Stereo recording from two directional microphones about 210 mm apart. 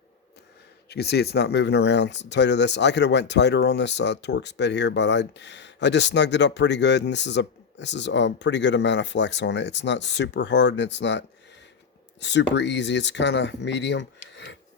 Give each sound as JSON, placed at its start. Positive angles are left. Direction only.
{"t": 0.9, "sound": "speech", "side_deg": 50}